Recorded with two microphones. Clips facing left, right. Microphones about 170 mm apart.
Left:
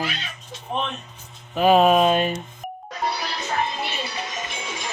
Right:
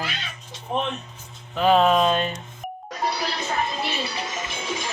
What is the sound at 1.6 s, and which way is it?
Speech, 10° left (ahead or behind).